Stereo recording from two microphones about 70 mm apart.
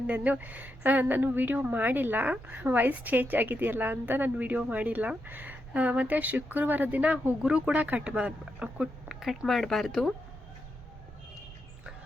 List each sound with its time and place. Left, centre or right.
0.1 s a woman's voice: right
9.0 s a sound: centre
9.5 s speech: centre